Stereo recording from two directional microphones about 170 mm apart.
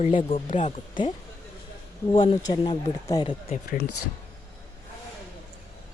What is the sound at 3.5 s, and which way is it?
Speech, 50° left (ahead or behind).